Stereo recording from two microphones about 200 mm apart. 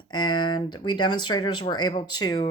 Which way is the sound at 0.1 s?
20° left (ahead or behind).